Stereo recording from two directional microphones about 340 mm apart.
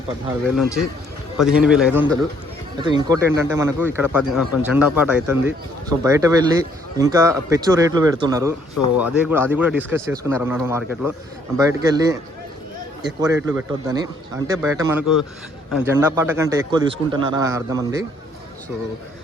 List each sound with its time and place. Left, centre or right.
0.4 s a man's voice: centre
13.1 s a man's voice: centre
15.0 s a man's voice: left
15.7 s a man's voice: centre